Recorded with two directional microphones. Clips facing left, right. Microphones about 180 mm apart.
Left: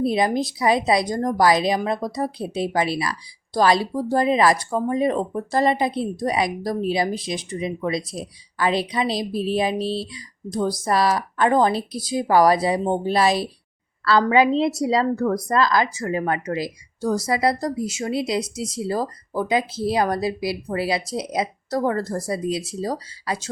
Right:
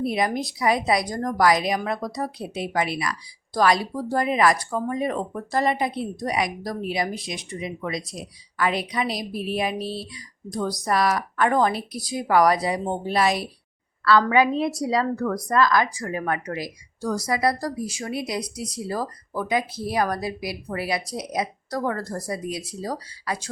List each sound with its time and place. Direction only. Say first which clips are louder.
0.0 s speech: left 4 dB; 30° left (ahead or behind)